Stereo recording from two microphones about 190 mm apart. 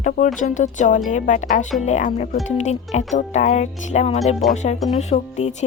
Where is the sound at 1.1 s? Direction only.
40° left (ahead or behind).